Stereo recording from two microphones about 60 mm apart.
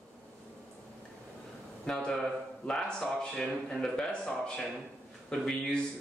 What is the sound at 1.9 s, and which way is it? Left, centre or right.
Speech, centre.